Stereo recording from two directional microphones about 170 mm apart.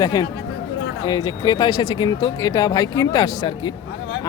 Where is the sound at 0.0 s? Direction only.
20° left (ahead or behind).